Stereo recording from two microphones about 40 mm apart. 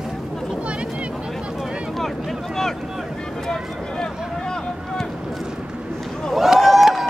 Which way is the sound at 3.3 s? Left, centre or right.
Centre.